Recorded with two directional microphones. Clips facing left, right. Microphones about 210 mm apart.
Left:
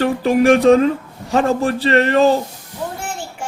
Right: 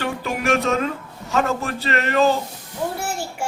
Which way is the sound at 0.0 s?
35° left (ahead or behind).